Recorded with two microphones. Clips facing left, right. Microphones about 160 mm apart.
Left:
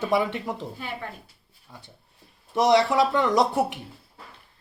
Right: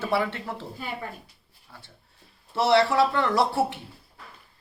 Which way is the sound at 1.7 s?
15° left (ahead or behind).